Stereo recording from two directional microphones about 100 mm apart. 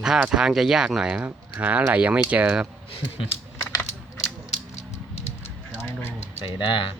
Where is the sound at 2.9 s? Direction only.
60° left (ahead or behind).